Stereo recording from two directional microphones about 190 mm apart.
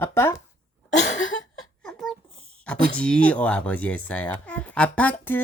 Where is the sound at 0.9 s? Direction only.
40° left (ahead or behind).